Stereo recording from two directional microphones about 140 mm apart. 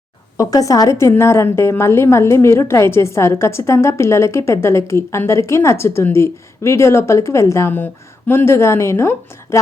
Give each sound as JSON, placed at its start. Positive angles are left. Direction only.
{"t": 0.3, "sound": "a woman's voice", "side_deg": 25}